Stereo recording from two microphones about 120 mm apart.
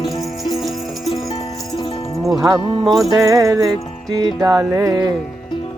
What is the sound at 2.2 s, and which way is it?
Music, 30° right (ahead or behind).